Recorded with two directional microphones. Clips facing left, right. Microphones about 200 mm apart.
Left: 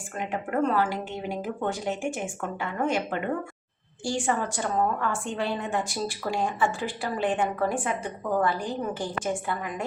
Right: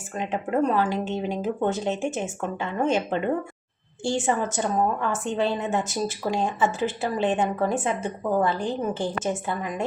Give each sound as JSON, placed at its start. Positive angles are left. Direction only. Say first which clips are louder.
{"t": 0.2, "sound": "a woman's voice", "louder": "right 3 dB", "side_deg": -20}